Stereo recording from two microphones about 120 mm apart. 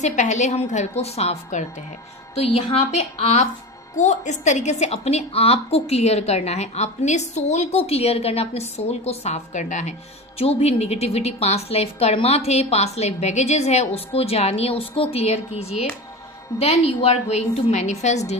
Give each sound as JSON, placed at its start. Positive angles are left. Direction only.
{"t": 0.0, "sound": "a woman's voice", "side_deg": 80}
{"t": 2.3, "sound": "a woman's voice", "side_deg": 55}
{"t": 3.9, "sound": "a woman's voice", "side_deg": 85}
{"t": 10.4, "sound": "a woman's voice", "side_deg": 60}